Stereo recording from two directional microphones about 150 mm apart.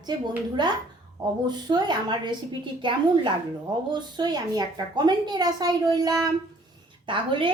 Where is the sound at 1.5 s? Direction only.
30° right (ahead or behind).